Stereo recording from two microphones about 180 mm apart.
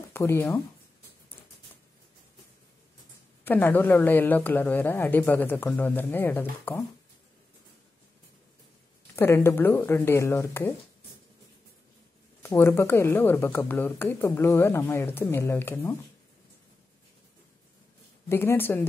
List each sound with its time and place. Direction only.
0.1 s speech: 15° left (ahead or behind)
3.4 s speech: 10° left (ahead or behind)
9.1 s speech: 15° left (ahead or behind)
12.4 s speech: 15° left (ahead or behind)
18.3 s speech: 15° left (ahead or behind)